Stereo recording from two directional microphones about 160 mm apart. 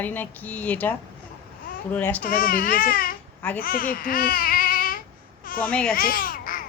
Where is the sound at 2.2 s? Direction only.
65° left (ahead or behind).